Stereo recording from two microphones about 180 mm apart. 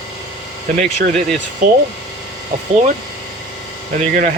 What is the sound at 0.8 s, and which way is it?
Speech, 45° right (ahead or behind).